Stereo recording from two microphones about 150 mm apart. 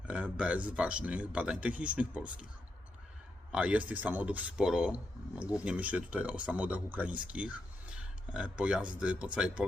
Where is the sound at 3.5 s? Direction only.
5° right (ahead or behind).